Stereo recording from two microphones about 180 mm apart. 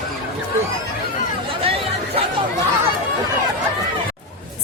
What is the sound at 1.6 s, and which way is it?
Chatter, 30° right (ahead or behind).